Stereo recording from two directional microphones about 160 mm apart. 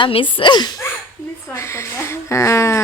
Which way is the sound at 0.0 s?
35° left (ahead or behind).